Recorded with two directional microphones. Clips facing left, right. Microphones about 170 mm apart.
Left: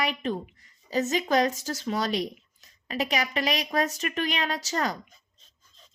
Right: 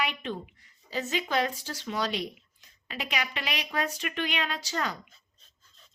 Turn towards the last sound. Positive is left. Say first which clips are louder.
# left 4 dB
turn(degrees=40)  # may be behind; listen again after turning